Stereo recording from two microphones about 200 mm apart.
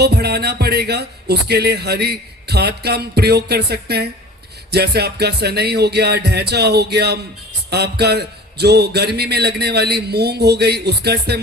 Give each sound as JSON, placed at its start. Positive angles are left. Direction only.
{"t": 0.0, "sound": "speech", "side_deg": -55}
{"t": 4.7, "sound": "music", "side_deg": -55}
{"t": 7.7, "sound": "speech", "side_deg": -55}